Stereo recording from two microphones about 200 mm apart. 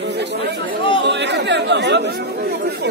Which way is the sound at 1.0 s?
60° right (ahead or behind).